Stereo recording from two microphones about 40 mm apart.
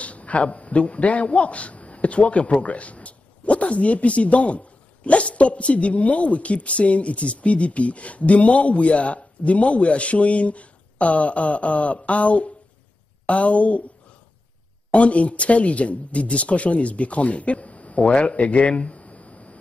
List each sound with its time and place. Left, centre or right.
0.0 s a man's voice: left
14.9 s speech: left